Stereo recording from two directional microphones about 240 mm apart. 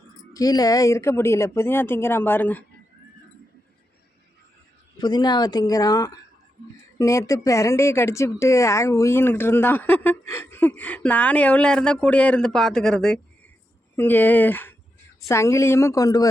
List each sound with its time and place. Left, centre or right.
0.3 s speech: centre
4.9 s speech: centre